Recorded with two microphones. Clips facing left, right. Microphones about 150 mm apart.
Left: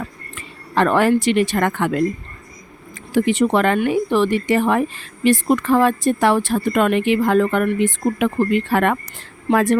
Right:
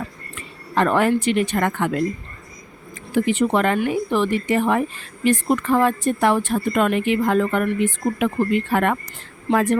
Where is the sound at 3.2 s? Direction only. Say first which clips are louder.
Left 2 dB; 75° left (ahead or behind).